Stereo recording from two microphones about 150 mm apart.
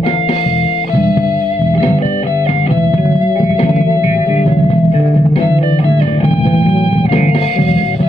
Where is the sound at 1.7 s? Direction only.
50° left (ahead or behind).